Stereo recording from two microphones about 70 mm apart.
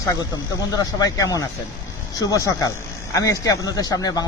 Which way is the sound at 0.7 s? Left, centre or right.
Left.